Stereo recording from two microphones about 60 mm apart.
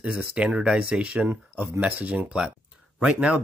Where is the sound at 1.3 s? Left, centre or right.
Right.